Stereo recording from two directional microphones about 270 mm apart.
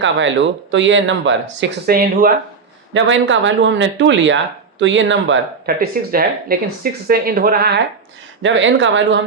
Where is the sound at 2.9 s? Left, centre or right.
Right.